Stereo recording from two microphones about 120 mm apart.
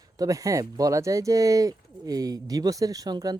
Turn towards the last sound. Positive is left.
turn(degrees=-30)  # may be behind; listen again after turning